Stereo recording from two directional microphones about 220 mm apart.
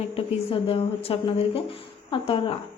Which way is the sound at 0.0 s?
25° left (ahead or behind).